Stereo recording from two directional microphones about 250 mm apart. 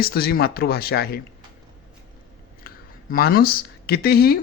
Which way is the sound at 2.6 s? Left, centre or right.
Left.